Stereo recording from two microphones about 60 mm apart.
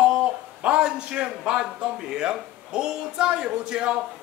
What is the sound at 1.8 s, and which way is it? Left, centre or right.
Speech, centre.